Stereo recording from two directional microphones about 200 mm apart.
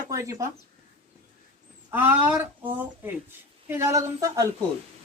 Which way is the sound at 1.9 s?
10° right (ahead or behind).